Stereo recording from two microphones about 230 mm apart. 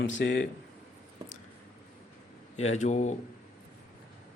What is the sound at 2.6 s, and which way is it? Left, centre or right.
Speech, left.